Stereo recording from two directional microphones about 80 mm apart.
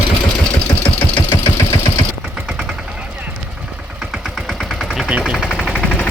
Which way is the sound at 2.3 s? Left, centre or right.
Centre.